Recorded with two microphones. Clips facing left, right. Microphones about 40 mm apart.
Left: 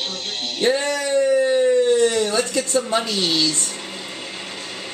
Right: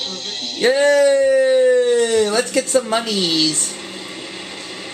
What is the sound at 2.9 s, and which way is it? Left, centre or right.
Speech, right.